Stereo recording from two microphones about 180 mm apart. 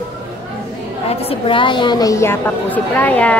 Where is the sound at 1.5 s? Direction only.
25° left (ahead or behind); by 3.3 s 10° left (ahead or behind).